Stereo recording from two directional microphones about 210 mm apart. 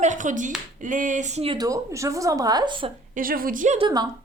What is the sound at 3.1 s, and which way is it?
Speech, 45° right (ahead or behind).